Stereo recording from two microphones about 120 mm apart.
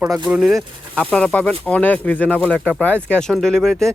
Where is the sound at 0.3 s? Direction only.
5° right (ahead or behind).